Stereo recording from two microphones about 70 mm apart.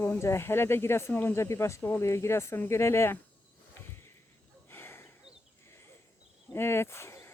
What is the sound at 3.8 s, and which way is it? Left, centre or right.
Sniff, left.